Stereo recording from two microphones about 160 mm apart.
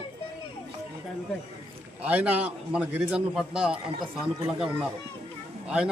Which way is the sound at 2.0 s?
10° right (ahead or behind).